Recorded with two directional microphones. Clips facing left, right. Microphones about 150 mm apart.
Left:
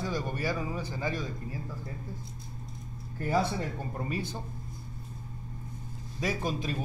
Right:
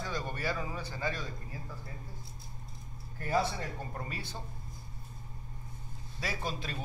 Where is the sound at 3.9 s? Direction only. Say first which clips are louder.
Left 7 dB; 15° left (ahead or behind).